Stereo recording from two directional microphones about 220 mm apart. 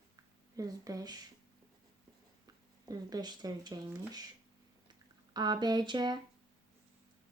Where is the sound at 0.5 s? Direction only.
15° right (ahead or behind).